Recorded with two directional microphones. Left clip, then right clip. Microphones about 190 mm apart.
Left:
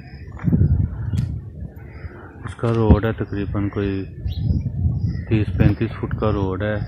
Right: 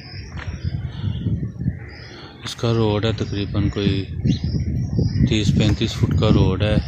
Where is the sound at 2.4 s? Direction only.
10° right (ahead or behind).